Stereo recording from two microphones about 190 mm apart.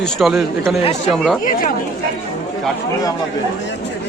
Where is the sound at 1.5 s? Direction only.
45° left (ahead or behind).